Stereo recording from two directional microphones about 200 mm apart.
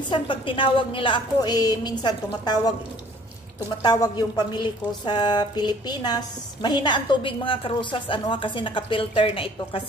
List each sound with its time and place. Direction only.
0.1 s a woman's voice: 25° left (ahead or behind)
3.8 s a woman's voice: 20° left (ahead or behind)